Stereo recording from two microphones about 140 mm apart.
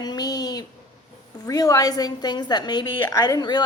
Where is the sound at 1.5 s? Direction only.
25° left (ahead or behind).